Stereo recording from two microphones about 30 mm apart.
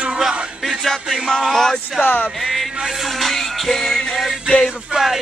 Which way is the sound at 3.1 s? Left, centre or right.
Centre.